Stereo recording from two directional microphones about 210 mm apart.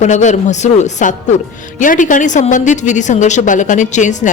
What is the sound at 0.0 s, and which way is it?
A woman's voice, 35° left (ahead or behind).